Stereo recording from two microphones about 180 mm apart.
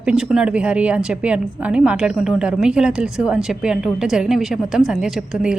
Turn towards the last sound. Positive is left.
turn(degrees=-5)  # may be behind; listen again after turning